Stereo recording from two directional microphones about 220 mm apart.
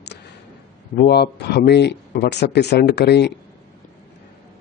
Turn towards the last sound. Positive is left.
turn(degrees=50)  # may be behind; listen again after turning